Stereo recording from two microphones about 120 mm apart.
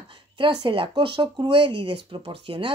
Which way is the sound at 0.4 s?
45° right (ahead or behind).